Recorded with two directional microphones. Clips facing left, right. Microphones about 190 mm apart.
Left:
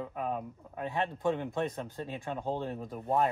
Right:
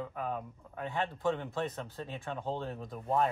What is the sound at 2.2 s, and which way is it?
Speech, 15° left (ahead or behind).